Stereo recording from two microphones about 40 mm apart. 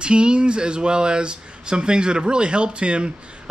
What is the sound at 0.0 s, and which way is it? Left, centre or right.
Speech, right.